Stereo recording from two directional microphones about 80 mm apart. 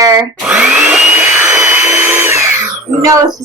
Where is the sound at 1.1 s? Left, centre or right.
Right.